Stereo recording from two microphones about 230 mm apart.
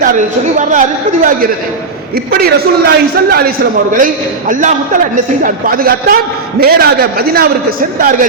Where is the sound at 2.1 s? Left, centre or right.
Right.